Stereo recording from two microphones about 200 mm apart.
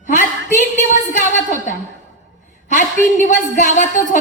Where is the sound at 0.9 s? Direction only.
40° left (ahead or behind).